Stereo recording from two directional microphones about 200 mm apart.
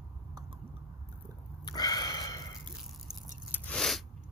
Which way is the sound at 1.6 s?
20° left (ahead or behind).